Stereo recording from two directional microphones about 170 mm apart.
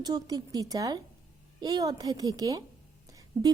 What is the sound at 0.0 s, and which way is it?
A woman's voice, 25° right (ahead or behind).